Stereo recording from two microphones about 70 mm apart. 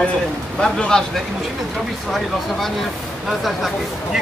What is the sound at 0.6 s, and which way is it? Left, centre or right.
Speech, centre.